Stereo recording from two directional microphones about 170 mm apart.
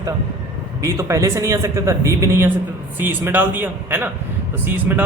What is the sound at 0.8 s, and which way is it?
A man's voice, 20° right (ahead or behind).